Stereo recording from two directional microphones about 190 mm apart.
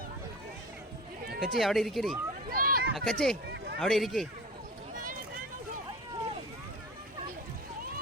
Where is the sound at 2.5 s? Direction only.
50° right (ahead or behind).